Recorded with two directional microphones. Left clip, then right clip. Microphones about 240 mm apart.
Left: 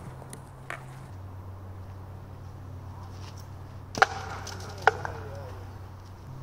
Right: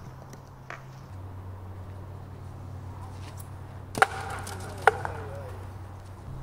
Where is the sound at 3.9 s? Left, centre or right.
Centre.